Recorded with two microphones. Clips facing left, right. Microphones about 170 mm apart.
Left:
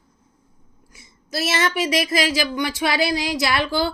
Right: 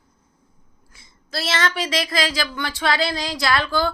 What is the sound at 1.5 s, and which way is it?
A woman's voice, 20° left (ahead or behind).